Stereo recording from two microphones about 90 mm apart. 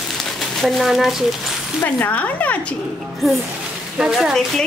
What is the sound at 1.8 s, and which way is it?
Speech, 20° left (ahead or behind).